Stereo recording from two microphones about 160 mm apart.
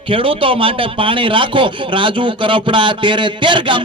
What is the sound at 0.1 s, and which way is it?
A man's voice, 35° right (ahead or behind).